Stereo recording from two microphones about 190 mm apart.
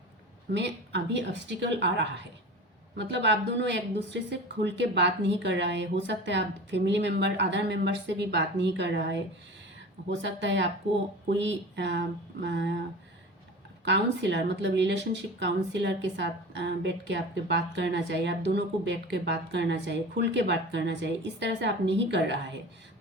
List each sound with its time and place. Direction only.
0.5 s speech: 65° right (ahead or behind)
13.8 s speech: 70° right (ahead or behind)